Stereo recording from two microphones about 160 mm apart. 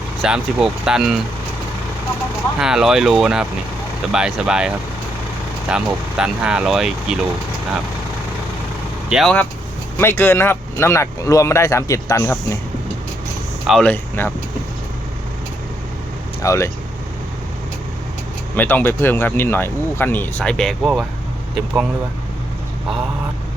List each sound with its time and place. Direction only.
0.2 s speech: 5° right (ahead or behind)
2.6 s speech: 5° right (ahead or behind)
9.0 s speech: 5° right (ahead or behind)
10.0 s speech: 15° left (ahead or behind)
13.7 s speech: 5° left (ahead or behind)
16.4 s speech: 20° left (ahead or behind)
18.5 s speech: 10° left (ahead or behind)